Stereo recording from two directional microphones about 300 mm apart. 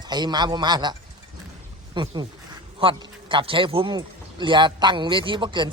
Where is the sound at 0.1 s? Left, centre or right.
Centre.